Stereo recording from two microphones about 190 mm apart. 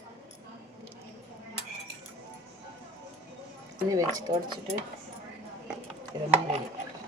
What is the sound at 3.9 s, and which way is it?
Speech, 20° right (ahead or behind).